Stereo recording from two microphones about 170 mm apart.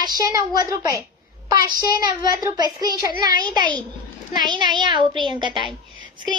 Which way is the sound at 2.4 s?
25° right (ahead or behind).